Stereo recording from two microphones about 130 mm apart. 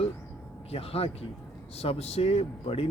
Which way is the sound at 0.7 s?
50° left (ahead or behind).